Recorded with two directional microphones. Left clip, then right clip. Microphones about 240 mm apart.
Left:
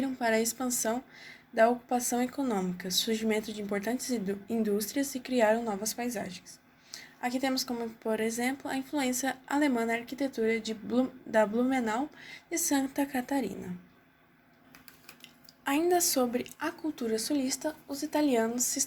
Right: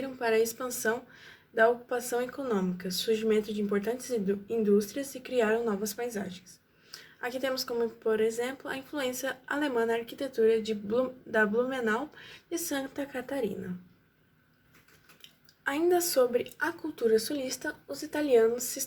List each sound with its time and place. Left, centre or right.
0.0 s a woman's voice: left
15.2 s speech: left